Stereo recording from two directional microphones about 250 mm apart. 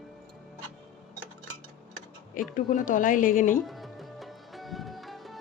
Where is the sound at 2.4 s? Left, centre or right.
Left.